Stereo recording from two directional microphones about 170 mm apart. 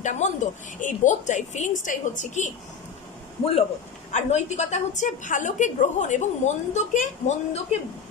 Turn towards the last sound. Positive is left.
turn(degrees=40)  # may be behind; listen again after turning